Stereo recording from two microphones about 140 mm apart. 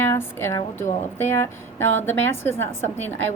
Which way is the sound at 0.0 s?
15° left (ahead or behind).